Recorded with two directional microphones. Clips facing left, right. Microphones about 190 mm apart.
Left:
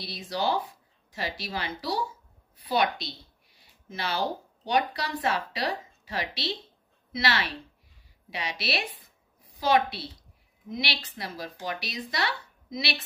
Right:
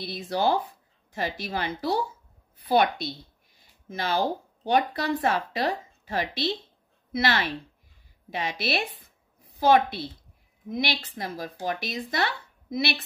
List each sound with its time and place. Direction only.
0.0 s speech: 50° right (ahead or behind)
3.5 s a sound: 45° right (ahead or behind)
4.6 s speech: 50° right (ahead or behind)